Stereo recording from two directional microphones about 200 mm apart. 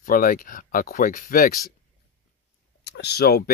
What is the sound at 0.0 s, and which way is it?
Speech, 45° left (ahead or behind).